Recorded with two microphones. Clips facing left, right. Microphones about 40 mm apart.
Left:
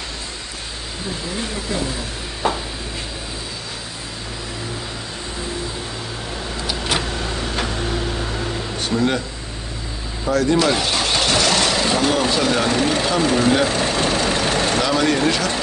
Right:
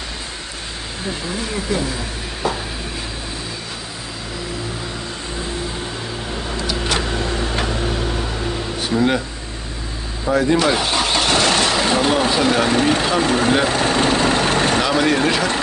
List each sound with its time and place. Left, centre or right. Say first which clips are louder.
2.4 s a sound: left 1 dB; left
8.8 s speech: right 2 dB; centre
10.3 s speech: right 1 dB; centre
13.6 s vehicle: right 2 dB; right
14.8 s speech: right 1 dB; centre